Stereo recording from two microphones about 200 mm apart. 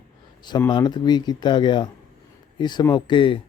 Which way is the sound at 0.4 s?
20° left (ahead or behind).